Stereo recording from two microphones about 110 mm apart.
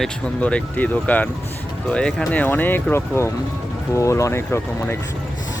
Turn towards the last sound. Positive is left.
turn(degrees=20)  # may be behind; listen again after turning